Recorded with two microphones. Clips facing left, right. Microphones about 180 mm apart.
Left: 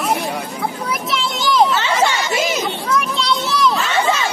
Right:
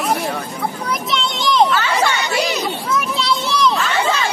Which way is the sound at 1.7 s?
20° left (ahead or behind).